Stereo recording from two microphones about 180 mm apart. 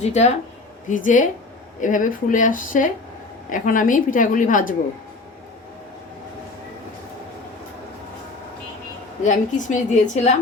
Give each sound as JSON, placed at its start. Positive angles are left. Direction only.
{"t": 0.0, "sound": "a woman's voice", "side_deg": 40}
{"t": 9.2, "sound": "a woman's voice", "side_deg": 45}